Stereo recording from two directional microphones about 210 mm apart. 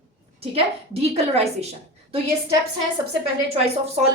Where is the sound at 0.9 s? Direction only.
25° right (ahead or behind).